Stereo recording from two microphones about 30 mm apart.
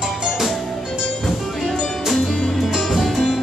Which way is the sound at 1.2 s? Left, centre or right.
Centre.